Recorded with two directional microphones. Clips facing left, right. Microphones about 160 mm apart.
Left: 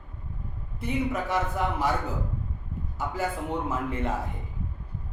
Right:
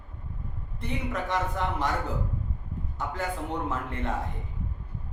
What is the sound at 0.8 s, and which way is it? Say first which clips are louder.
A man's voice: left 4 dB; 5° left (ahead or behind).